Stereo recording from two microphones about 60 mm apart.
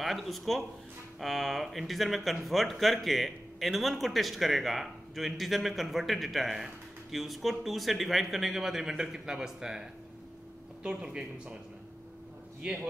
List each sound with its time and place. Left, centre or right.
0.0 s speech: centre